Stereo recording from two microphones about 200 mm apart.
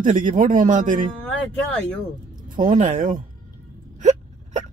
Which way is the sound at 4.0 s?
35° right (ahead or behind).